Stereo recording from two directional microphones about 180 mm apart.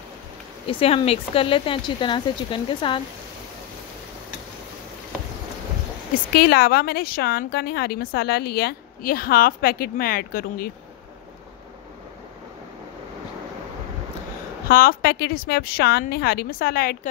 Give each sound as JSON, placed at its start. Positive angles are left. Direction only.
{"t": 0.7, "sound": "speech", "side_deg": 30}
{"t": 6.3, "sound": "a woman's voice", "side_deg": 60}
{"t": 14.7, "sound": "a woman's voice", "side_deg": 55}